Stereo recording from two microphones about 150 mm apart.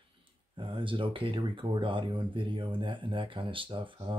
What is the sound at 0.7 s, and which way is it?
Speech, 35° right (ahead or behind).